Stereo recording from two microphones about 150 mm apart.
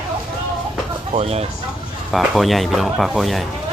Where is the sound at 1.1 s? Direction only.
45° right (ahead or behind).